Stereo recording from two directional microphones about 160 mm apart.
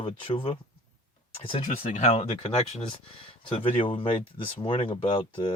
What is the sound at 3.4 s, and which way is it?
Speech, 35° left (ahead or behind).